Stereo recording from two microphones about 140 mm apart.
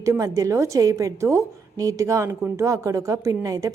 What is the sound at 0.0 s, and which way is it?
A woman's voice, 20° right (ahead or behind).